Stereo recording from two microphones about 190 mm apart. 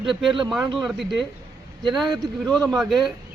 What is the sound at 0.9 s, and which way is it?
Speech, centre (ahead or behind).